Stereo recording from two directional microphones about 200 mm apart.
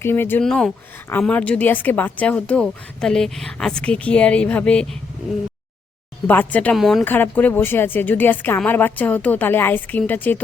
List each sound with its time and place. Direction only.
0.0 s speech: 10° left (ahead or behind)
6.2 s speech: 10° left (ahead or behind)